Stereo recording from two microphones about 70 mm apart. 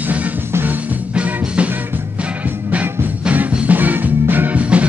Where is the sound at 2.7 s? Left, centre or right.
Right.